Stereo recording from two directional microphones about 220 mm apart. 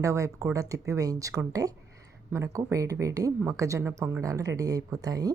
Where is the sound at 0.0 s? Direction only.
15° right (ahead or behind).